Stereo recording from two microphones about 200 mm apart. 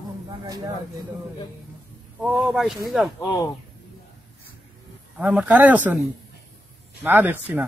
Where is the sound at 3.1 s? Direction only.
15° left (ahead or behind).